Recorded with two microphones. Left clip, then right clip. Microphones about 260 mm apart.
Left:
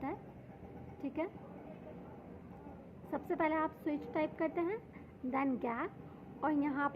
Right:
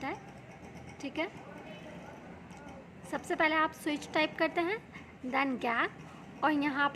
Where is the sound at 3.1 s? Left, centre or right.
Centre.